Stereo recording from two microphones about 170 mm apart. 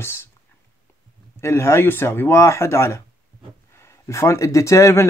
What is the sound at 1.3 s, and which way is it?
Speech, 15° left (ahead or behind).